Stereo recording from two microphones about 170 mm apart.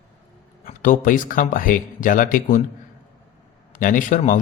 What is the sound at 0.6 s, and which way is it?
Speech, 55° left (ahead or behind).